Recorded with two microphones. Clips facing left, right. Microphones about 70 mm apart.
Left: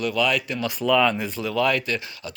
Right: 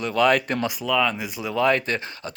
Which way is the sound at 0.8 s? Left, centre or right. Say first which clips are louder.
Left 6 dB; centre.